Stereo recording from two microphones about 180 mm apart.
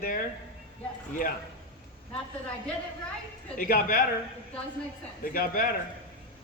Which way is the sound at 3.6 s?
50° left (ahead or behind).